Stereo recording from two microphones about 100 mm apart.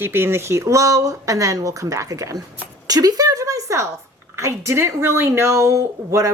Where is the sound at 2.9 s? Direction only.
40° right (ahead or behind).